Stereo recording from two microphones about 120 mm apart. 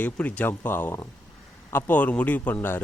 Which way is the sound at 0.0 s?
15° left (ahead or behind).